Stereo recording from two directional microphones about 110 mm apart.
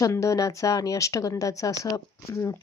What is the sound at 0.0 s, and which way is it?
Speech, 30° left (ahead or behind).